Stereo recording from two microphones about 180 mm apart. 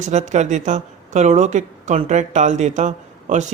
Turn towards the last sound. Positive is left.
turn(degrees=-40)  # may be behind; listen again after turning